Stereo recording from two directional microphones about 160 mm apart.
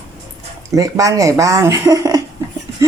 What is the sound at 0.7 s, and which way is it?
A woman's voice, 20° right (ahead or behind).